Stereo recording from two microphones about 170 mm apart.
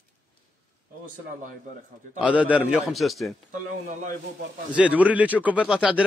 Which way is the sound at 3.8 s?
50° right (ahead or behind).